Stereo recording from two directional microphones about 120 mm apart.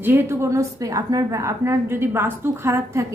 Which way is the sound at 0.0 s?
20° right (ahead or behind).